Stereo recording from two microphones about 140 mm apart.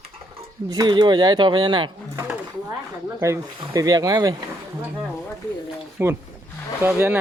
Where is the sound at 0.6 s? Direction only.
30° right (ahead or behind).